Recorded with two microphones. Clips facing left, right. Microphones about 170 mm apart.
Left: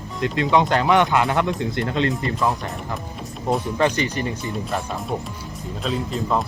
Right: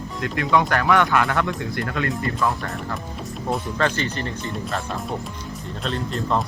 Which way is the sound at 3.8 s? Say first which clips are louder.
Left 3 dB; 15° left (ahead or behind).